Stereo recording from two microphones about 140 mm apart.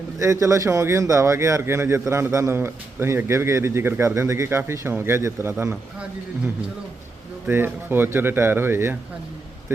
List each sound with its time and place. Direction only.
0.2 s speech: 20° right (ahead or behind)